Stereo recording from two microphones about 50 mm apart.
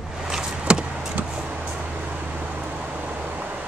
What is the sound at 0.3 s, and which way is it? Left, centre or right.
Vehicle, centre.